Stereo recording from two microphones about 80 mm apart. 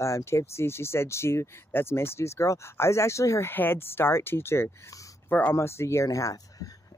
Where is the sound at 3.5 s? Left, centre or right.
Left.